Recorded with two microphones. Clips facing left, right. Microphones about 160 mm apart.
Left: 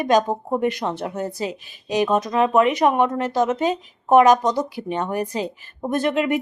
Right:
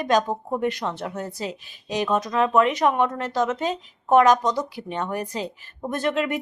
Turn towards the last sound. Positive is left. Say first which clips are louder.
# left 4 dB
turn(degrees=10)  # may be behind; listen again after turning